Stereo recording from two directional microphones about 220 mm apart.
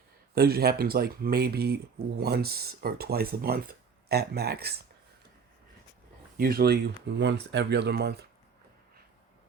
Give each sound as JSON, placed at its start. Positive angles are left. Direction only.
{"t": 0.3, "sound": "speech", "side_deg": -45}
{"t": 6.3, "sound": "speech", "side_deg": -40}